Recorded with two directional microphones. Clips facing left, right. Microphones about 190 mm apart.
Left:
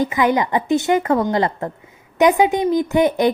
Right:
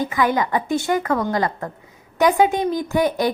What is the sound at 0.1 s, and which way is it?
A woman's voice, 20° left (ahead or behind).